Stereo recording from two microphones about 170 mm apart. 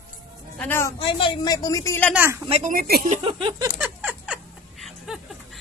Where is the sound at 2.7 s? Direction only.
60° right (ahead or behind).